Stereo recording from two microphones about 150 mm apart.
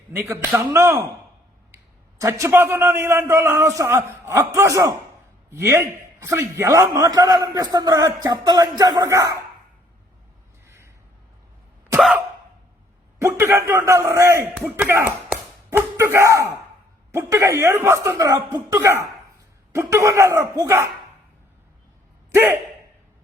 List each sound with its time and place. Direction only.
0.1 s a man's voice: 15° right (ahead or behind)
10.7 s a sound: 15° right (ahead or behind)
11.9 s cough: 10° right (ahead or behind)
13.1 s a man's voice: 20° right (ahead or behind)
22.3 s speech: 15° right (ahead or behind)